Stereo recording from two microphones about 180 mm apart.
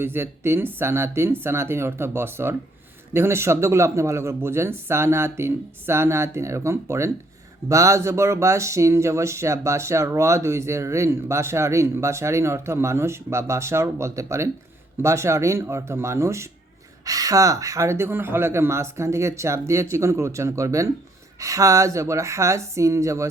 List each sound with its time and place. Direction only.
0.0 s speech: 15° right (ahead or behind)